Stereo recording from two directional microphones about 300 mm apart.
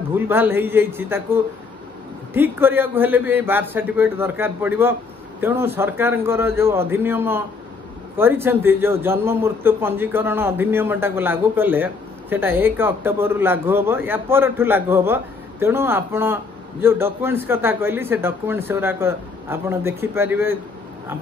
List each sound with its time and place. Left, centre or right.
0.1 s speech: centre